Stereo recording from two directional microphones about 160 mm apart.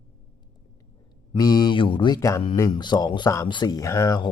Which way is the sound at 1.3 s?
25° left (ahead or behind).